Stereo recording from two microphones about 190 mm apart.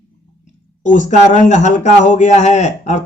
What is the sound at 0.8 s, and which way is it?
A man's voice, 40° left (ahead or behind).